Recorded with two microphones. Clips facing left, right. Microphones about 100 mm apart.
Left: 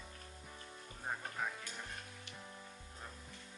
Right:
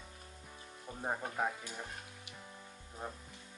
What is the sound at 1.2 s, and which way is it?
Music, 15° right (ahead or behind).